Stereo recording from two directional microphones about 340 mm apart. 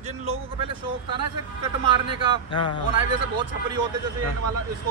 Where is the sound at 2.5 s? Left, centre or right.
Centre.